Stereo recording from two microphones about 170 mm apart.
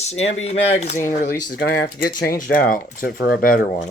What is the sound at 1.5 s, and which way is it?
Speech, 60° left (ahead or behind).